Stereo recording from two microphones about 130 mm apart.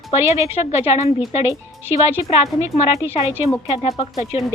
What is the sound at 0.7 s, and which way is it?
Speech, 55° left (ahead or behind).